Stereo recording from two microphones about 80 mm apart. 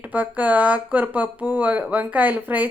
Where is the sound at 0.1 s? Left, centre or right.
Right.